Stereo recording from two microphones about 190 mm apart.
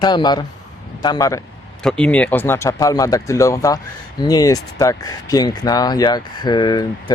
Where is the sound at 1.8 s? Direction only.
5° left (ahead or behind).